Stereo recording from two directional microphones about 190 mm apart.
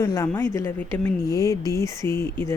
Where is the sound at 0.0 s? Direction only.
15° left (ahead or behind).